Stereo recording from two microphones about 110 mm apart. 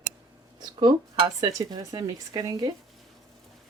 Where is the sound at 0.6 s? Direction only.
35° right (ahead or behind).